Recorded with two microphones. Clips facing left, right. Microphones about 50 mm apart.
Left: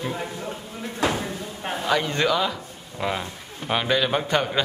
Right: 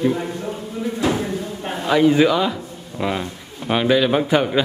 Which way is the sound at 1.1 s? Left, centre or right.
Centre.